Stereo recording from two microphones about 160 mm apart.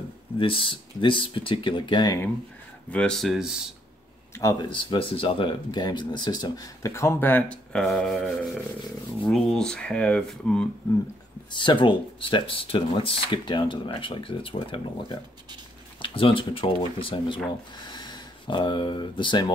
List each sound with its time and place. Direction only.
0.4 s speech: 35° left (ahead or behind)
2.9 s speech: 5° left (ahead or behind)
4.4 s speech: 25° left (ahead or behind); by 10.7 s 5° left (ahead or behind)
11.5 s speech: 30° left (ahead or behind)